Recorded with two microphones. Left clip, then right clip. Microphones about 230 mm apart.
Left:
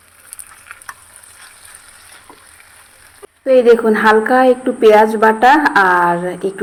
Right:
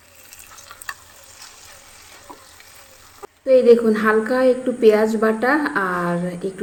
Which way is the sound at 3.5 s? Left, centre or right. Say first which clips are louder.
Left 3 dB; centre.